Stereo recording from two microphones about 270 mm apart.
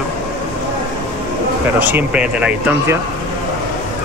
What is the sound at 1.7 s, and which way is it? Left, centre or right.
Speech, centre.